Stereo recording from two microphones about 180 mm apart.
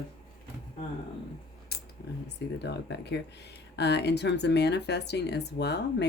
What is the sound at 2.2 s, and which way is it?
Speech, 70° left (ahead or behind).